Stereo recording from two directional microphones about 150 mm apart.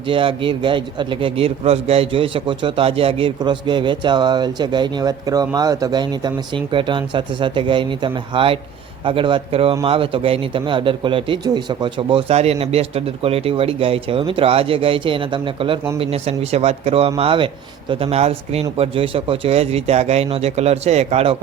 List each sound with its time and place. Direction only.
0.1 s a man's voice: 35° right (ahead or behind)